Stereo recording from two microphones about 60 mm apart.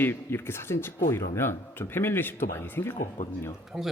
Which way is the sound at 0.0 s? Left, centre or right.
Left.